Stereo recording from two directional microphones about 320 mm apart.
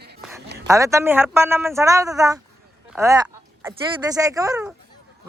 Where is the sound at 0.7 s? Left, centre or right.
Centre.